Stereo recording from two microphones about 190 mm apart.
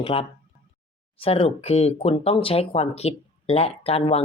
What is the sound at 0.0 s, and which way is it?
Speech, 30° left (ahead or behind).